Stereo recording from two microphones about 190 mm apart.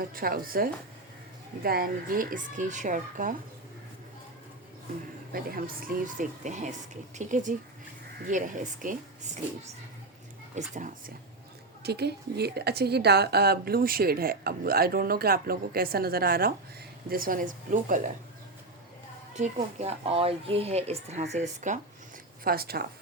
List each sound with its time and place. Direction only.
0.0 s a woman's voice: 50° right (ahead or behind)
5.3 s a woman's voice: 50° right (ahead or behind)
10.8 s speech: 40° right (ahead or behind)
11.8 s a woman's voice: 60° right (ahead or behind); by 18.1 s 45° right (ahead or behind)
19.3 s speech: 35° right (ahead or behind)
22.4 s a woman's voice: 55° right (ahead or behind)